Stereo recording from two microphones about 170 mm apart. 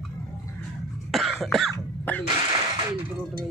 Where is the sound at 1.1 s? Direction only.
Centre (ahead or behind).